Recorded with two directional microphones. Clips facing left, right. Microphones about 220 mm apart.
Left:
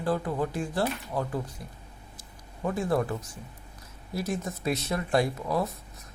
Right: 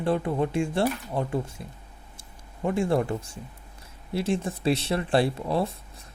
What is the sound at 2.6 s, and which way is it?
Speech, 25° right (ahead or behind).